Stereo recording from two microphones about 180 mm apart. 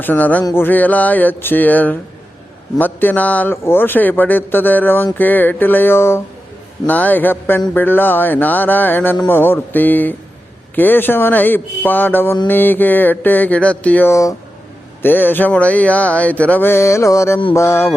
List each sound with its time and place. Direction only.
0.0 s a man's voice: 10° left (ahead or behind)